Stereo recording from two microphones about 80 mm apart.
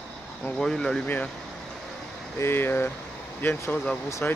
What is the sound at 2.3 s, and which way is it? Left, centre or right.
Speech, left.